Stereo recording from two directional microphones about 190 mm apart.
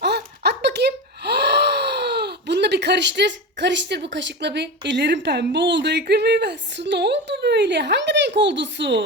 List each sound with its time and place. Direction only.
0.0 s a child's voice: 60° right (ahead or behind)